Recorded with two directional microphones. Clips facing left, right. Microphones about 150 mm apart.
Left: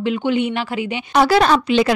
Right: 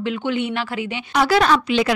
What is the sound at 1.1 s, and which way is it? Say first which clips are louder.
Speech: left 3 dB; 30° left (ahead or behind).